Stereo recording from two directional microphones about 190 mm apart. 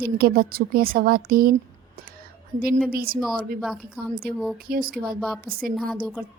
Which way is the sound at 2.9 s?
50° right (ahead or behind).